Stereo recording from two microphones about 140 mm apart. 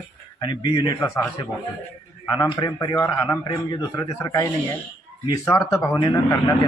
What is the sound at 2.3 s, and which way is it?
Speech, 30° left (ahead or behind).